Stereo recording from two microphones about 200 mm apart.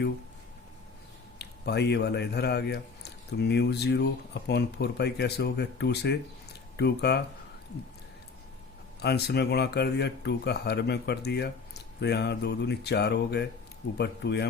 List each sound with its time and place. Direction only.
1.4 s speech: 55° left (ahead or behind)
9.0 s speech: 55° left (ahead or behind)